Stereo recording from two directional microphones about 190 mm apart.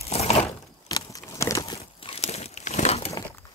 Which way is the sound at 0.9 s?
20° left (ahead or behind).